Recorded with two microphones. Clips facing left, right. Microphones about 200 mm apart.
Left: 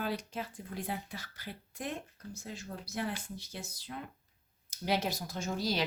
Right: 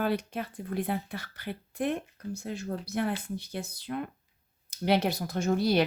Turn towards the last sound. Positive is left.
turn(degrees=-60)  # may be behind; listen again after turning